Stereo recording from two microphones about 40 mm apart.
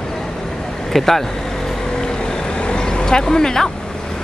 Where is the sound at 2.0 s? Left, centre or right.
Centre.